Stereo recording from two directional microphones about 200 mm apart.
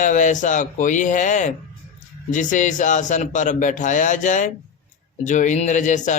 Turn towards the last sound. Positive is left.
turn(degrees=40)  # may be behind; listen again after turning